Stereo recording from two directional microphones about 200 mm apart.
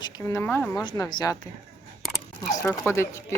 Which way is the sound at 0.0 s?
15° left (ahead or behind).